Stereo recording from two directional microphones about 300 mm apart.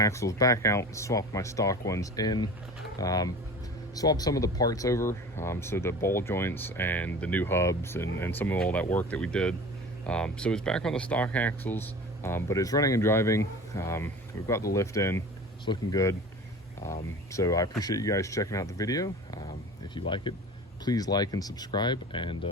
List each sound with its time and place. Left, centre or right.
0.0 s speech: centre